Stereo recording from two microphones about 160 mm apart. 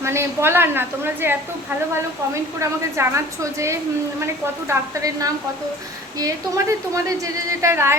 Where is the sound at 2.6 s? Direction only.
20° right (ahead or behind).